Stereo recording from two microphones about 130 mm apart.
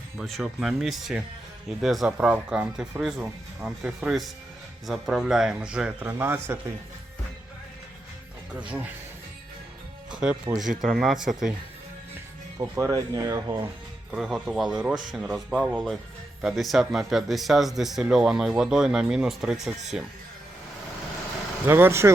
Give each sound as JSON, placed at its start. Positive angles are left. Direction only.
{"t": 0.2, "sound": "speech", "side_deg": 0}
{"t": 8.5, "sound": "speech", "side_deg": -10}
{"t": 10.1, "sound": "music", "side_deg": -5}
{"t": 10.6, "sound": "speech", "side_deg": -5}
{"t": 12.1, "sound": "speech", "side_deg": -20}
{"t": 14.1, "sound": "speech", "side_deg": -5}
{"t": 21.7, "sound": "speech", "side_deg": -15}